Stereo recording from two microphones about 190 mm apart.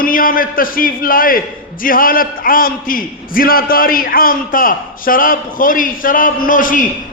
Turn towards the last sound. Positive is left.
turn(degrees=45)  # may be behind; listen again after turning